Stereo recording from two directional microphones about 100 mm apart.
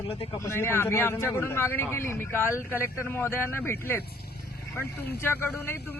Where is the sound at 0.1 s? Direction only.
75° left (ahead or behind).